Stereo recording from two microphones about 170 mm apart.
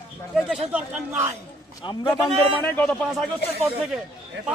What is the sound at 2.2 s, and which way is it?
Speech, 5° left (ahead or behind).